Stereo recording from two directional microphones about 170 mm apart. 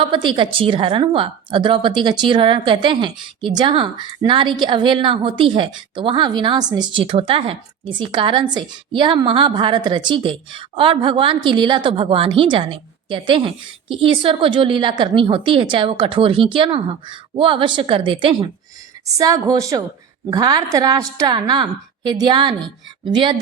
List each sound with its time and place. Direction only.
0.1 s a woman's voice: 30° right (ahead or behind)